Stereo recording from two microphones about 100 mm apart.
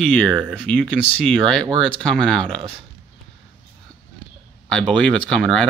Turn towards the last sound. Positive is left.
turn(degrees=5)  # may be behind; listen again after turning